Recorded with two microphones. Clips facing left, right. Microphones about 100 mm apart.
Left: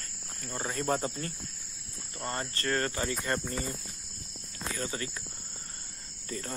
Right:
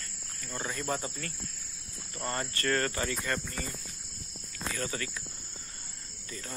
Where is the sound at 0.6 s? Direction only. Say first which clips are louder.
Left 4 dB; 40° left (ahead or behind).